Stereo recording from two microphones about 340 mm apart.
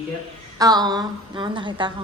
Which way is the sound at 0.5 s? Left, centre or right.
Centre.